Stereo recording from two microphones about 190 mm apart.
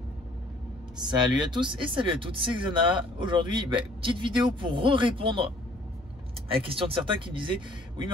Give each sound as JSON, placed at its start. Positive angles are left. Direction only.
{"t": 0.9, "sound": "speech", "side_deg": -25}
{"t": 6.5, "sound": "speech", "side_deg": -30}